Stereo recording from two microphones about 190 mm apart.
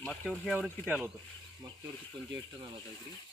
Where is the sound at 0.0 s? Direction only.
5° left (ahead or behind).